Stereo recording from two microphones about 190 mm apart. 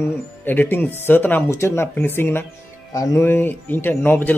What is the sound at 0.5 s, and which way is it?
A man's voice, 10° left (ahead or behind).